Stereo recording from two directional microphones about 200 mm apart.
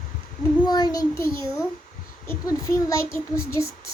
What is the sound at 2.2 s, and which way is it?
A child's voice, 15° left (ahead or behind).